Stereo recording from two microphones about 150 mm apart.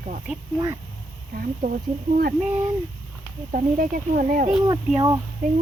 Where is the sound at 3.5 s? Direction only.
60° right (ahead or behind).